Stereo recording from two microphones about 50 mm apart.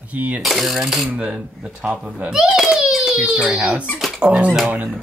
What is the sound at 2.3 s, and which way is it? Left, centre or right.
Baby cry, centre.